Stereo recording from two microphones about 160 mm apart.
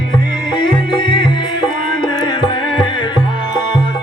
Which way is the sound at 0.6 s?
30° left (ahead or behind).